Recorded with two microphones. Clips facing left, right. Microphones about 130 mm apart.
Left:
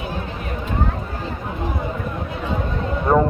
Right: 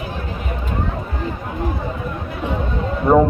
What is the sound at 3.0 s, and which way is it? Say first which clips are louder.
Speech: right 4 dB; 10° right (ahead or behind).